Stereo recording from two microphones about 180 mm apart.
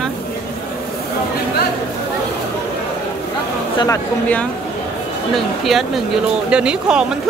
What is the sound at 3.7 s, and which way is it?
Speech, 20° left (ahead or behind).